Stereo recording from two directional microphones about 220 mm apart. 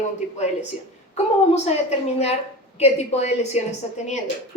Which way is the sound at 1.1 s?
30° left (ahead or behind).